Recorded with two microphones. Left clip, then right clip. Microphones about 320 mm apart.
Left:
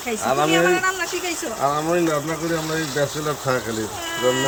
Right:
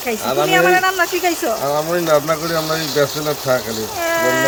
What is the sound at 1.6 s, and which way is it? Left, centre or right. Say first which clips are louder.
Speech: right 2 dB; centre.